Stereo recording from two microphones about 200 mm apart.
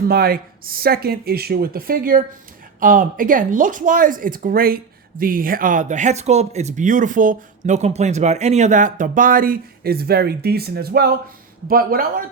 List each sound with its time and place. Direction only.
0.1 s speech: 50° right (ahead or behind)